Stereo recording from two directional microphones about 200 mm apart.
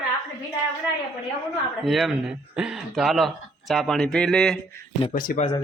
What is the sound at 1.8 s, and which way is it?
Speech, centre (ahead or behind).